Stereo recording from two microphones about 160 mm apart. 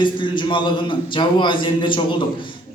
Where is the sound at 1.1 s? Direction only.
30° left (ahead or behind).